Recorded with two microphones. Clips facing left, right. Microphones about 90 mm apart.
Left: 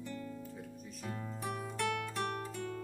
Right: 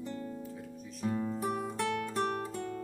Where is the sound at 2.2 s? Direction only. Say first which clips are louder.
Right 5 dB; 30° right (ahead or behind).